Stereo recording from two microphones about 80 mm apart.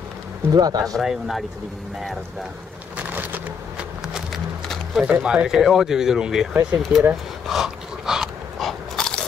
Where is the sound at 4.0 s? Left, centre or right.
Centre.